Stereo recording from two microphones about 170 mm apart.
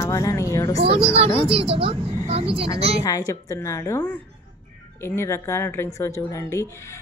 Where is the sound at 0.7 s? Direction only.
35° right (ahead or behind).